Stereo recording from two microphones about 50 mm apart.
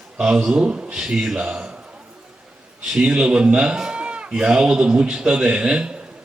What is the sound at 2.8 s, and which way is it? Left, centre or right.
A man's voice, centre.